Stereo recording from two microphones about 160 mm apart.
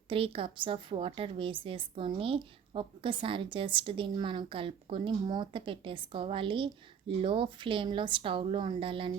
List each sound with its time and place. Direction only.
0.1 s a woman's voice: 35° right (ahead or behind)